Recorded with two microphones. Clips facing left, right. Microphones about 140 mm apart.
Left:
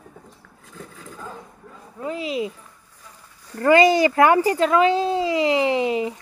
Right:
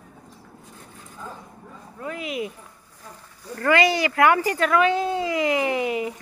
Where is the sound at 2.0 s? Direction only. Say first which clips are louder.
Left 4 dB; 25° left (ahead or behind).